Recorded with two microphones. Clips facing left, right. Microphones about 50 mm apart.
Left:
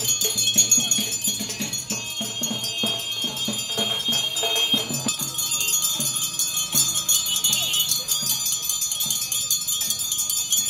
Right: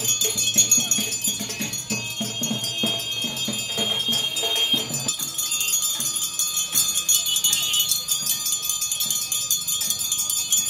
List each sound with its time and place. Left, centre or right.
0.5 s cowbell: right